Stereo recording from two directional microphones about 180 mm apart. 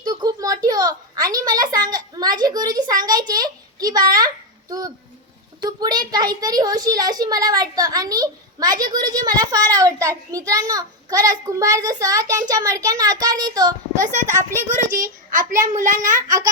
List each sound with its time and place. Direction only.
0.0 s a sound: 20° right (ahead or behind)
5.6 s a child's voice: 20° right (ahead or behind)
14.0 s a child's voice: 40° right (ahead or behind)
14.3 s speech: 15° right (ahead or behind)
14.9 s a child's voice: 45° right (ahead or behind)
16.2 s a child's voice: 20° right (ahead or behind)